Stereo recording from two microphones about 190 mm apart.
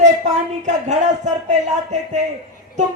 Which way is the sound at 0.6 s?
40° right (ahead or behind).